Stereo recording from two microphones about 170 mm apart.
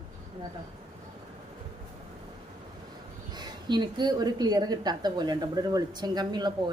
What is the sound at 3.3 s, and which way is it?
A woman's voice, 25° right (ahead or behind).